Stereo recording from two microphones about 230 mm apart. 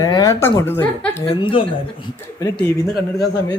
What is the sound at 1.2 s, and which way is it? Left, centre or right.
Speech, centre.